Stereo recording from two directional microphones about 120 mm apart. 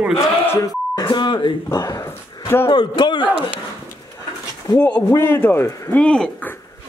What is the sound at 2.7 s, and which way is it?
Speech, 40° left (ahead or behind).